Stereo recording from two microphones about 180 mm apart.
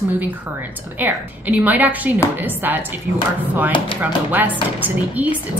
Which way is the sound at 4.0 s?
10° right (ahead or behind).